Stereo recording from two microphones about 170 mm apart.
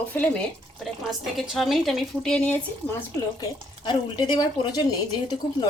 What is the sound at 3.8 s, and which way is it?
Speech, 25° left (ahead or behind).